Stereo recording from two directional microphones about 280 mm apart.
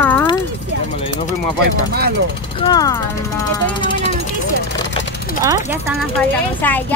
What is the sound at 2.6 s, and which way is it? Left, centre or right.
Speech, centre.